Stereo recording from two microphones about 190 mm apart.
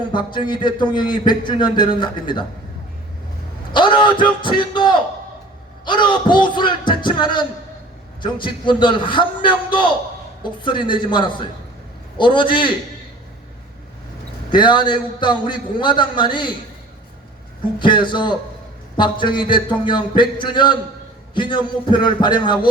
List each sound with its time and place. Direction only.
0.1 s a man's voice: 25° left (ahead or behind)
3.7 s a man's voice: 25° left (ahead or behind)
14.5 s a man's voice: 25° left (ahead or behind)
17.7 s a man's voice: 25° left (ahead or behind)